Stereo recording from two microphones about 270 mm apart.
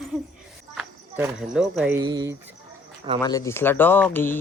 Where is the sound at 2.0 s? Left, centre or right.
Centre.